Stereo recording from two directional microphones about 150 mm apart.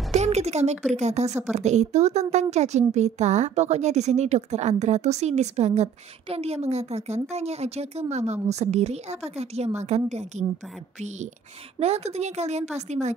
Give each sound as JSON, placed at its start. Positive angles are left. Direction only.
{"t": 0.1, "sound": "a woman's voice", "side_deg": -50}
{"t": 11.8, "sound": "a woman's voice", "side_deg": -45}